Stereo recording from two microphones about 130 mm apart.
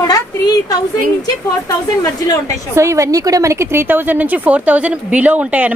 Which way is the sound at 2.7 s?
25° right (ahead or behind).